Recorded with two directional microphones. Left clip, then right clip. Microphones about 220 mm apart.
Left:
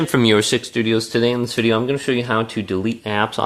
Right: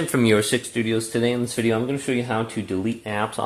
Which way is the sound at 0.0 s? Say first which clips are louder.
Left 4 dB; 35° left (ahead or behind).